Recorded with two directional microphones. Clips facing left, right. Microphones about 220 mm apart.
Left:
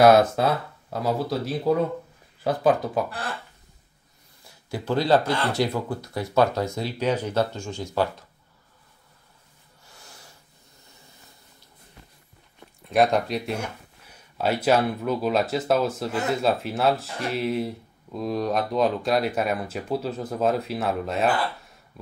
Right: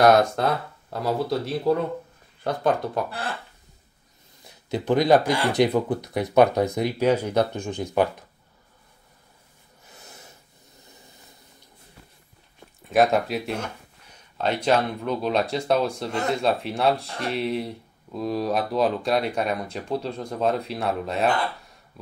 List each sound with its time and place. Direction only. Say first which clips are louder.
0.0 s speech: left 1 dB; 5° left (ahead or behind)
4.5 s speech: right 4 dB; 20° right (ahead or behind)
9.8 s snort: right 3 dB; 20° right (ahead or behind)
12.9 s speech: right 1 dB; centre (ahead or behind)